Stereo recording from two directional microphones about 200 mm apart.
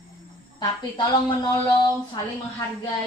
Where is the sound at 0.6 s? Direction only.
20° left (ahead or behind).